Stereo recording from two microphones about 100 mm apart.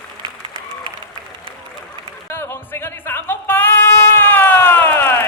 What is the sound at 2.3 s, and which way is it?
Music, 25° left (ahead or behind).